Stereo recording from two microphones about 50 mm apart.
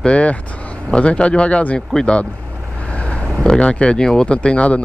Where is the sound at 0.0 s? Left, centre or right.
Left.